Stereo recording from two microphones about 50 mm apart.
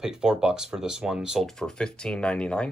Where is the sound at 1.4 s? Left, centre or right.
Centre.